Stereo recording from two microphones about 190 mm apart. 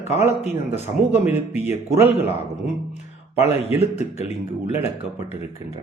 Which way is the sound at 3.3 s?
35° left (ahead or behind).